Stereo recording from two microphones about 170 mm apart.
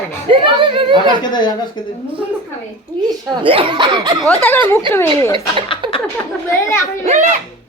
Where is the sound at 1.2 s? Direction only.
25° left (ahead or behind).